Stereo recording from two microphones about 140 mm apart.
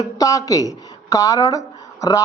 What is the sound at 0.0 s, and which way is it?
Speech, 25° left (ahead or behind).